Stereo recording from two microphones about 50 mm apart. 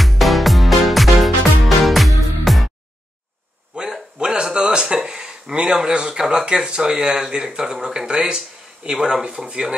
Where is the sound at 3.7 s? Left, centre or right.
Centre.